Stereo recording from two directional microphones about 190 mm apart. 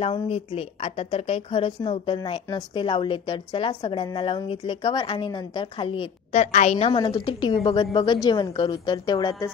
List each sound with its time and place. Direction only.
0.0 s a woman's voice: 30° left (ahead or behind)